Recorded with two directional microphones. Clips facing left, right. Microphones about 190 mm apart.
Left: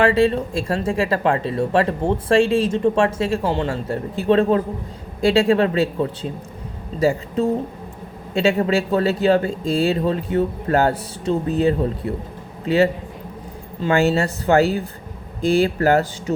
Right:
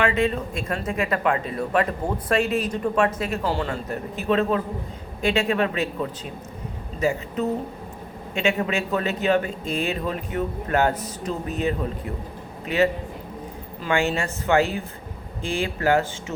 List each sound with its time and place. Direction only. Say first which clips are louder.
0.0 s a man's voice: left 6 dB; 35° left (ahead or behind)
13.9 s speech: left 5 dB; 40° left (ahead or behind)